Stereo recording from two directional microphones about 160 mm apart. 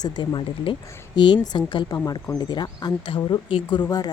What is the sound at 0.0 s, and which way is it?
Speech, 30° left (ahead or behind).